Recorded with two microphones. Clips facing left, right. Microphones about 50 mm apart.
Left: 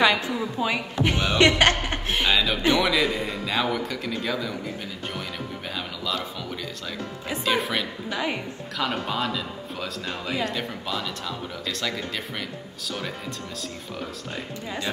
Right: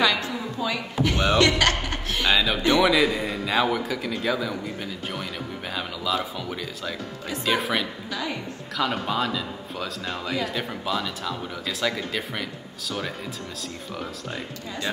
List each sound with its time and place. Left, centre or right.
0.0 s a woman's voice: left
2.3 s speech: centre
7.4 s speech: centre
8.1 s a woman's voice: left
8.7 s speech: centre